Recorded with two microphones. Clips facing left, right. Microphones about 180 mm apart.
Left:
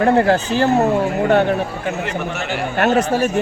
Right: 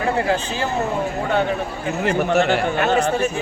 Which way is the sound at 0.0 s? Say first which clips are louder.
Left 6 dB; 60° left (ahead or behind).